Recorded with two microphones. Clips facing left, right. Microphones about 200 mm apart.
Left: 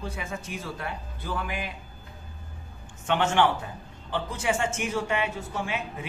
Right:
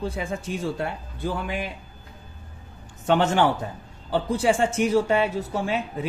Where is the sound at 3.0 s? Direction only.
40° right (ahead or behind).